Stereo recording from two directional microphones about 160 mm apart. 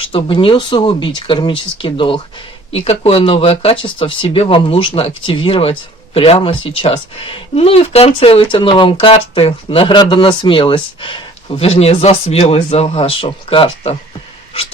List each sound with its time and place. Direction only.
0.0 s speech: 35° left (ahead or behind)